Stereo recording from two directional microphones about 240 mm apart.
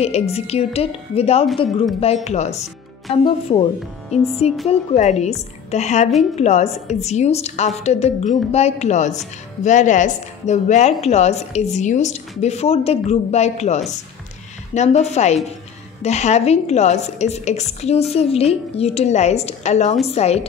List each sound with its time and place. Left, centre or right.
0.0 s speech: left